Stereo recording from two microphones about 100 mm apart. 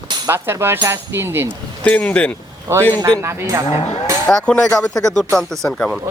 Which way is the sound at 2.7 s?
30° right (ahead or behind).